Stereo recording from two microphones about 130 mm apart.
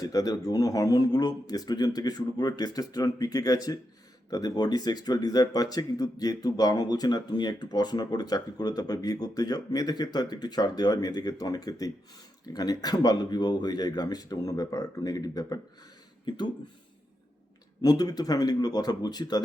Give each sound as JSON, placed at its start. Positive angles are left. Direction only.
{"t": 0.0, "sound": "speech", "side_deg": 30}
{"t": 17.8, "sound": "speech", "side_deg": 30}